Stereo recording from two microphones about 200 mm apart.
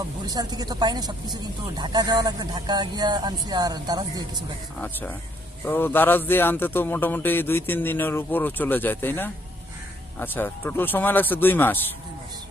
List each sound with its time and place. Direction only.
0.3 s speech: 20° right (ahead or behind)
4.8 s speech: 10° left (ahead or behind)